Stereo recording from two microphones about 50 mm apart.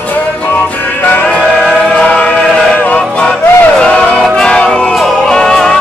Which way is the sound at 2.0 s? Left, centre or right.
Left.